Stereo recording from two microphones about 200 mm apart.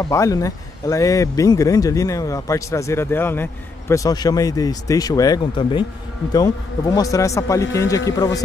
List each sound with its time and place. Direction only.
0.0 s speech: 15° left (ahead or behind)